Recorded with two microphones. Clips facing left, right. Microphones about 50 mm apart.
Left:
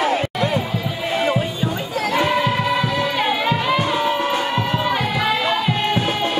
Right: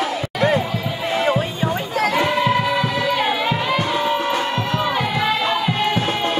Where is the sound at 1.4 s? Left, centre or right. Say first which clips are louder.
Right 1 dB; right.